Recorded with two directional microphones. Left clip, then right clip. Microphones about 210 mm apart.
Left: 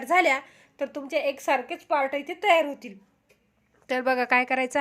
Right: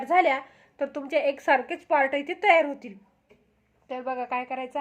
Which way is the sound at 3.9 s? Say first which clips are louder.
Left 7 dB; 40° left (ahead or behind).